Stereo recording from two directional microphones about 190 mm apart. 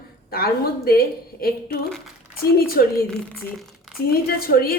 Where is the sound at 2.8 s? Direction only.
50° left (ahead or behind).